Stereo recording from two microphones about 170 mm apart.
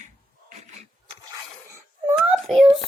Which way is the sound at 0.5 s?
45° right (ahead or behind).